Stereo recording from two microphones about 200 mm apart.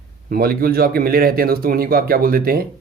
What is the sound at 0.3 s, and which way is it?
Speech, 50° right (ahead or behind).